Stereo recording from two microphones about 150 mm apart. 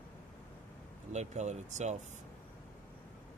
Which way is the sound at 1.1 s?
50° right (ahead or behind).